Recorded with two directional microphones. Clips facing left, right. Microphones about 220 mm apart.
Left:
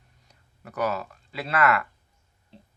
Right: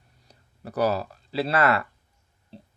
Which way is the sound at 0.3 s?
35° right (ahead or behind).